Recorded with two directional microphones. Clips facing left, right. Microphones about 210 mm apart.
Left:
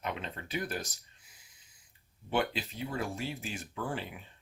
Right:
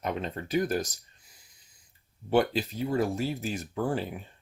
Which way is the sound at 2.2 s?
40° right (ahead or behind).